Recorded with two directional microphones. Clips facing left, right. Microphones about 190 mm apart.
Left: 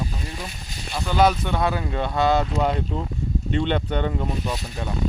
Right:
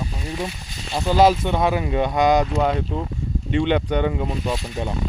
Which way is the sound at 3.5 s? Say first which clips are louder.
Right 4 dB; 10° right (ahead or behind).